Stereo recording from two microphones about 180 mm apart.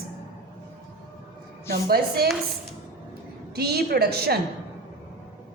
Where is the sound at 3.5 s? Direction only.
60° right (ahead or behind).